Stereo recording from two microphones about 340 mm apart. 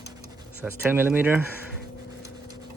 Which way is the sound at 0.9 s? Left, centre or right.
Centre.